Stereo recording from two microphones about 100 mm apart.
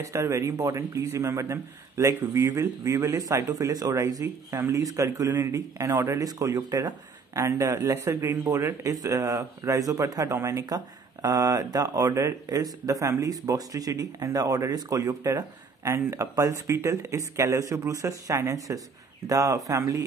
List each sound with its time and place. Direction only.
0.0 s speech: 30° right (ahead or behind)